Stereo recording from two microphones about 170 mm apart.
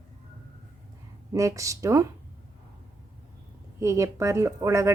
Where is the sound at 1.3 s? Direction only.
20° right (ahead or behind).